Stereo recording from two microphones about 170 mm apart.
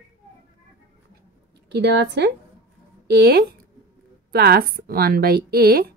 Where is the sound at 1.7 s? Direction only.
75° right (ahead or behind).